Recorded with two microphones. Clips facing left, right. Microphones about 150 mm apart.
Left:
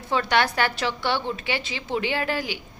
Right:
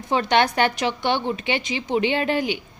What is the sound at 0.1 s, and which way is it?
A woman's voice, 20° right (ahead or behind).